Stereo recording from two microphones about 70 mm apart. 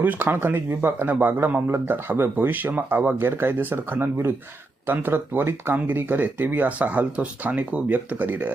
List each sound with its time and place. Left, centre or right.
0.0 s speech: right